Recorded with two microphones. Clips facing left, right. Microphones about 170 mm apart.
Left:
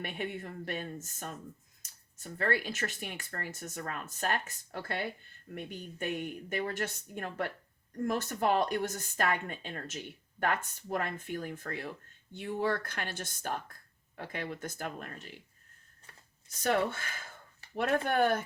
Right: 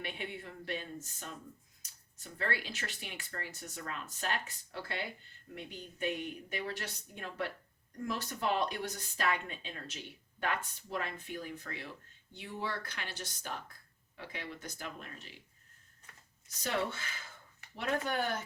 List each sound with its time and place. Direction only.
0.0 s speech: 45° left (ahead or behind)
16.5 s speech: 50° left (ahead or behind)